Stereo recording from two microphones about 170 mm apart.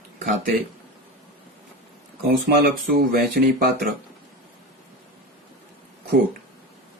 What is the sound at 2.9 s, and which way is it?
Speech, 60° right (ahead or behind).